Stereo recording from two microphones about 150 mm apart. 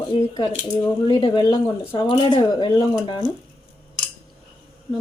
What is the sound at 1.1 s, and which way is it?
Speech, 30° left (ahead or behind).